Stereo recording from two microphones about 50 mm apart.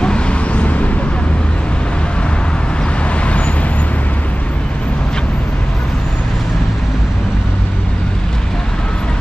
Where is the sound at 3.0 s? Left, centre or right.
Left.